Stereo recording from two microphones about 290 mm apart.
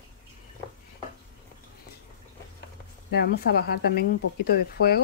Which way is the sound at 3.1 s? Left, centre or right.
Left.